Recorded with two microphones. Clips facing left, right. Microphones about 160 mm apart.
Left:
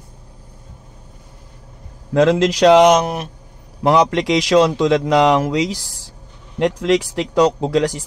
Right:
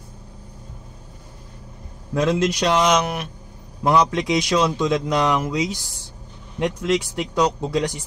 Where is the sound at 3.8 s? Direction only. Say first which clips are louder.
Left 4 dB; 75° left (ahead or behind).